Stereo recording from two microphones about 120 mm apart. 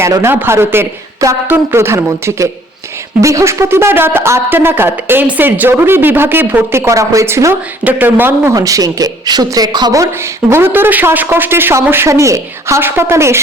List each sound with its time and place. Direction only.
0.0 s speech: 20° right (ahead or behind)
8.5 s speech: 30° right (ahead or behind)
10.5 s speech: 20° right (ahead or behind)